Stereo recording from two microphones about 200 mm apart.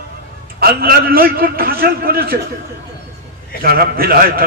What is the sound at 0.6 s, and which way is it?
A man's voice, 50° right (ahead or behind).